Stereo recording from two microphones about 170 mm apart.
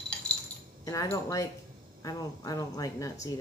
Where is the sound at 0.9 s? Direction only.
20° left (ahead or behind).